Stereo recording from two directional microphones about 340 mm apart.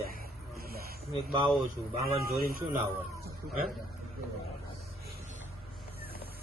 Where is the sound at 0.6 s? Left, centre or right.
Right.